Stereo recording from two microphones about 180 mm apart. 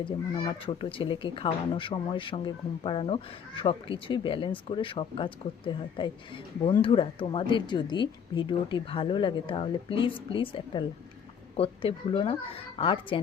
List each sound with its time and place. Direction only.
0.0 s speech: 25° left (ahead or behind)